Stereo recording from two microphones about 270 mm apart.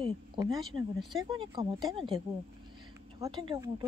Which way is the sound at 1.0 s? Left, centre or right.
Centre.